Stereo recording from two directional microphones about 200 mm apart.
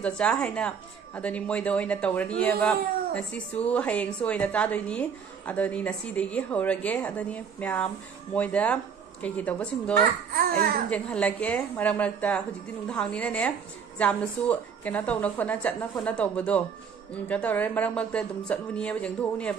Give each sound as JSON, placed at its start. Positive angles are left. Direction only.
{"t": 0.0, "sound": "speech", "side_deg": 5}
{"t": 10.3, "sound": "speech", "side_deg": -50}
{"t": 10.9, "sound": "speech", "side_deg": 5}